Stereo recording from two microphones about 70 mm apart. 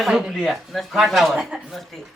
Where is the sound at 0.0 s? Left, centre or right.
Centre.